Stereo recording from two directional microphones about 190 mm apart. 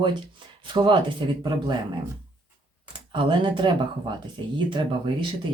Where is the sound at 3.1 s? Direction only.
25° right (ahead or behind).